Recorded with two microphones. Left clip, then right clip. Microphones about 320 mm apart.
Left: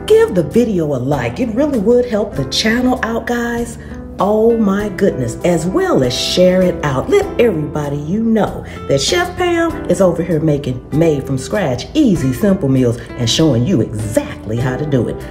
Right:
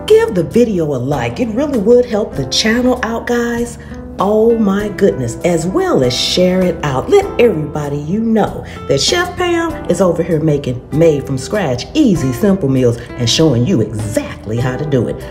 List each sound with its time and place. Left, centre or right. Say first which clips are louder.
0.1 s speech: even; centre